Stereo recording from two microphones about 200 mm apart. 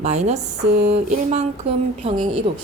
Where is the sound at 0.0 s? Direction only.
35° right (ahead or behind).